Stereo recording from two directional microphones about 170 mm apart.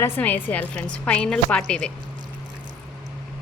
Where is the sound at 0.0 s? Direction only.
10° left (ahead or behind).